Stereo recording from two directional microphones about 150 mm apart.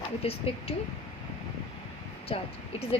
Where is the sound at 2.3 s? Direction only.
40° left (ahead or behind).